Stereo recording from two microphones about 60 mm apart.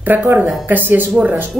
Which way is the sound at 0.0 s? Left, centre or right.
Right.